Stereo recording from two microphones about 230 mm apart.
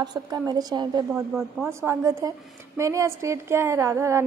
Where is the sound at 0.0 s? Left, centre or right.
Centre.